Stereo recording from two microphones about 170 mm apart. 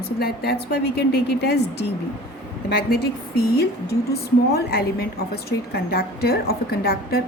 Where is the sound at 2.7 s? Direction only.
60° left (ahead or behind).